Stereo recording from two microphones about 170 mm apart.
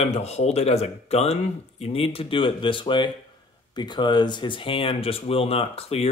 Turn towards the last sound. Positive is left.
turn(degrees=35)  # may be behind; listen again after turning